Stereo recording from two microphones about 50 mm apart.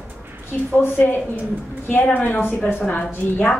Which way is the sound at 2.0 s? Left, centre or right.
Left.